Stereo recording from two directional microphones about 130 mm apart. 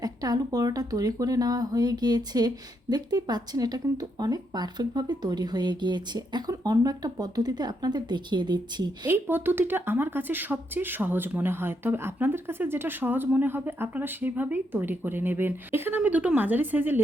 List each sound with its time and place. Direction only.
0.0 s speech: 30° right (ahead or behind)
9.0 s speech: 15° right (ahead or behind)